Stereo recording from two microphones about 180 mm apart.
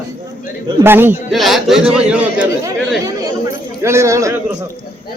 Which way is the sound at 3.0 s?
20° right (ahead or behind).